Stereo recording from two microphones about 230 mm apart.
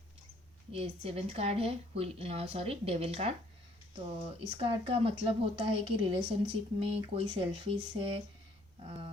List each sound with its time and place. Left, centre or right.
0.7 s speech: right